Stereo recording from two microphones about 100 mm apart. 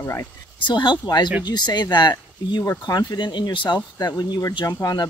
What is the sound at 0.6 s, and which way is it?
Speech, 50° left (ahead or behind).